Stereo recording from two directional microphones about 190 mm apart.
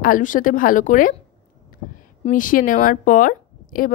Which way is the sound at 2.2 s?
45° left (ahead or behind).